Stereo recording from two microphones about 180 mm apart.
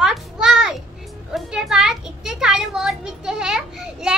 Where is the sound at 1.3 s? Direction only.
Centre (ahead or behind).